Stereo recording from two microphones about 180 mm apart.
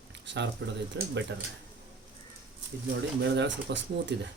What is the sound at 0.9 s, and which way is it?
Speech, 85° right.